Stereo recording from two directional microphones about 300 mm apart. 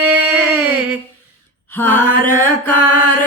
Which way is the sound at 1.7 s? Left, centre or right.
Centre.